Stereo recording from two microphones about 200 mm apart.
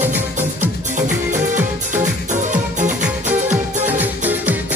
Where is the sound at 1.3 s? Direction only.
40° right (ahead or behind).